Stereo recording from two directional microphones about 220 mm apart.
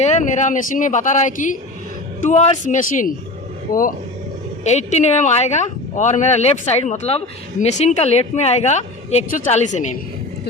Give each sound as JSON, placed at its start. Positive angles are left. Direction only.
{"t": 0.0, "sound": "speech", "side_deg": 35}